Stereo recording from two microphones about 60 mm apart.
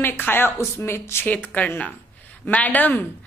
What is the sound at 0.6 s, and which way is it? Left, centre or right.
Speech, left.